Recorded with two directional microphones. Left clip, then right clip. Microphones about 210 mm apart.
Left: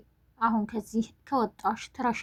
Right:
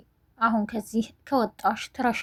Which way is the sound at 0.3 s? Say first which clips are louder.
Right 3 dB; 35° right (ahead or behind).